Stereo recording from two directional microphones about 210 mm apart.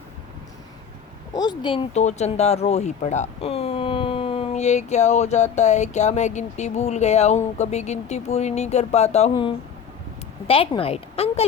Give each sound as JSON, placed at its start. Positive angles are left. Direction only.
{"t": 1.3, "sound": "a woman's voice", "side_deg": 20}